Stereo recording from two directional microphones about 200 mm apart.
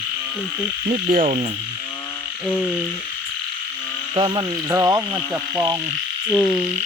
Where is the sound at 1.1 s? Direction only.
40° right (ahead or behind).